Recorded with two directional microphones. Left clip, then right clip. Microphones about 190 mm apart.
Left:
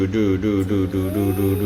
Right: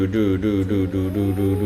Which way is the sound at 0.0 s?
Centre (ahead or behind).